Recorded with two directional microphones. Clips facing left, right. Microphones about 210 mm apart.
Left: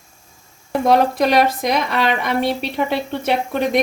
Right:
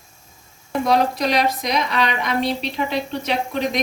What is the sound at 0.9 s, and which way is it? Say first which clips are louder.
A woman's voice: left 4 dB; 55° left (ahead or behind).